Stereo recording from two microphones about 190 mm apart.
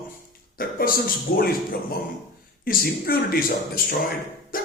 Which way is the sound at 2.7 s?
50° left (ahead or behind).